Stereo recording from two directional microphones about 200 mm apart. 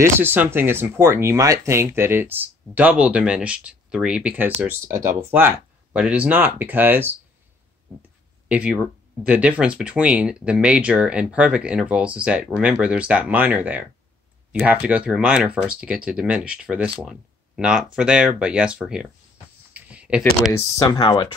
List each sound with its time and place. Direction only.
0.0 s speech: 10° right (ahead or behind)
8.5 s speech: 5° right (ahead or behind)
19.7 s computer keyboard: 5° right (ahead or behind)
20.5 s speech: 20° left (ahead or behind)